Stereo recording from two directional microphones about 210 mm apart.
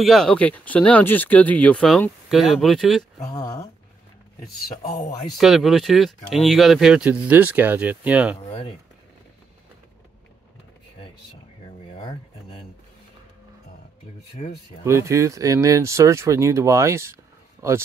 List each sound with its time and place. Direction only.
0.0 s speech: centre (ahead or behind)
3.3 s speech: 20° left (ahead or behind)
5.4 s speech: centre (ahead or behind)
11.9 s a sound: 25° left (ahead or behind)
14.9 s speech: 15° right (ahead or behind)